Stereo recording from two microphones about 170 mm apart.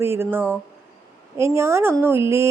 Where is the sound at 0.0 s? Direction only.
15° right (ahead or behind).